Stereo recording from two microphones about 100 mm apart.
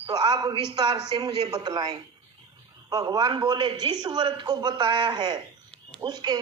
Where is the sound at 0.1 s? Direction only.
45° right (ahead or behind).